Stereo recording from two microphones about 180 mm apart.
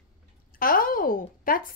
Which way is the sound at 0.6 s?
50° left (ahead or behind).